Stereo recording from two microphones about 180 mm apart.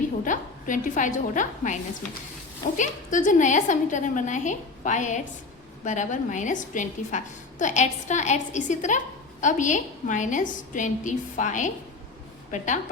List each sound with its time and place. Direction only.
0.3 s a woman's voice: 45° left (ahead or behind)